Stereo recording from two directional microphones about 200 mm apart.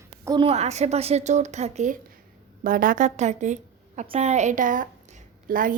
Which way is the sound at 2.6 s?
45° right (ahead or behind).